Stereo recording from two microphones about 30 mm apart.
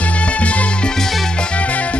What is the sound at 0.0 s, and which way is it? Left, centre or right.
Music, left.